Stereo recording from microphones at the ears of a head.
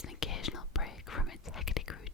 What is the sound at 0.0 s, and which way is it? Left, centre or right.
Whispering, left.